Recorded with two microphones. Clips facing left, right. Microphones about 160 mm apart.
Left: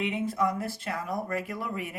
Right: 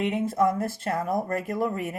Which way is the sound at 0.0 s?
45° right (ahead or behind).